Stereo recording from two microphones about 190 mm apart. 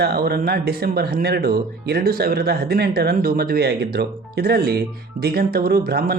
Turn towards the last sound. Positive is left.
turn(degrees=-50)  # may be behind; listen again after turning